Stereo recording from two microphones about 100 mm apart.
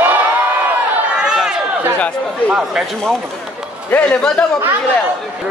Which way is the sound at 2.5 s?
5° right (ahead or behind).